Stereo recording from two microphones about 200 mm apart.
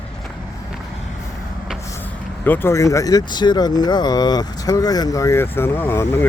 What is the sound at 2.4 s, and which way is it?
Speech, 10° left (ahead or behind).